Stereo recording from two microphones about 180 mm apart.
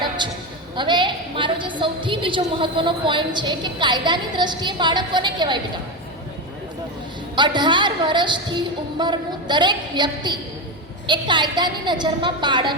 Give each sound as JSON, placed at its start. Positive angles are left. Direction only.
{"t": 0.2, "sound": "a woman's voice", "side_deg": -25}
{"t": 7.3, "sound": "a woman's voice", "side_deg": -25}